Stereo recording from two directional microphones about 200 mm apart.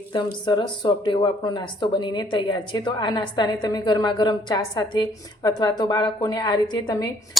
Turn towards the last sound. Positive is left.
turn(degrees=20)  # may be behind; listen again after turning